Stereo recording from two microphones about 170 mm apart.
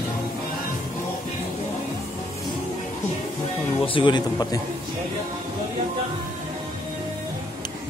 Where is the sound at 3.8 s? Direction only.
30° left (ahead or behind).